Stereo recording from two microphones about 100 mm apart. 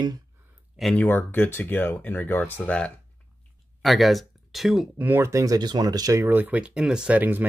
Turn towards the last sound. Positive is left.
turn(degrees=-15)  # may be behind; listen again after turning